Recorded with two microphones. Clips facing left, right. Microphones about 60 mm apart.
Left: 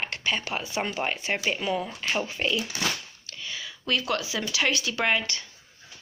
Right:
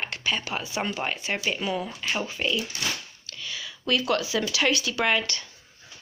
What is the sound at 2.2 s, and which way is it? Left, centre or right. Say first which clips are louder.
Speech: even; left.